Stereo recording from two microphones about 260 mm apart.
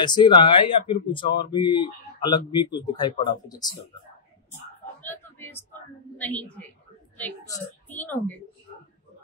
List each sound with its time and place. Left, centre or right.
0.0 s speech: centre
5.0 s a sound: centre
6.1 s a woman's voice: centre